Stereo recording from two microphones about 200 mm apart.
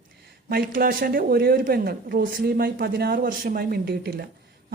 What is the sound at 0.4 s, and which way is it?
Speech, 50° right (ahead or behind).